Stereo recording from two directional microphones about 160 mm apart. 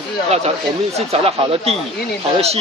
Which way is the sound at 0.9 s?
40° right (ahead or behind).